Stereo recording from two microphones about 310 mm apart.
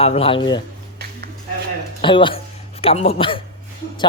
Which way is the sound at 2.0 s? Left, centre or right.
Centre.